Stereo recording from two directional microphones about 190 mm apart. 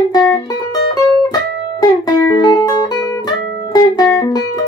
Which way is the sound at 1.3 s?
20° left (ahead or behind).